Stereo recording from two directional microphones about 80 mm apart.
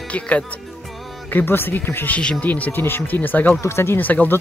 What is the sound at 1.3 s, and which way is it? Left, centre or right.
Speech, left.